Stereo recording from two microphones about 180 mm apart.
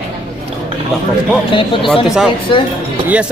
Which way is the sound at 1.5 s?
30° left (ahead or behind).